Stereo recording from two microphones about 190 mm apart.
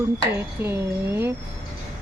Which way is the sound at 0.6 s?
10° right (ahead or behind).